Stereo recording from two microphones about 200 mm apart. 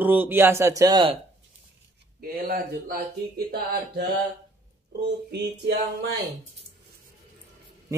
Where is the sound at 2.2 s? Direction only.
50° right (ahead or behind).